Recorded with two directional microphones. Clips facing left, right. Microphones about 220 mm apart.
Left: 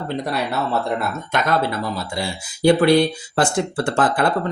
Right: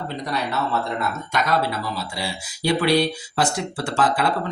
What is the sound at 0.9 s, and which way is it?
Speech, 55° left (ahead or behind).